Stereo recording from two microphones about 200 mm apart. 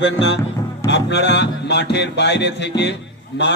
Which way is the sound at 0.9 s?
60° left (ahead or behind).